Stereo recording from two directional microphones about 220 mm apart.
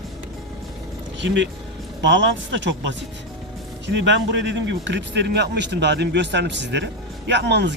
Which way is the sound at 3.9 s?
55° right (ahead or behind).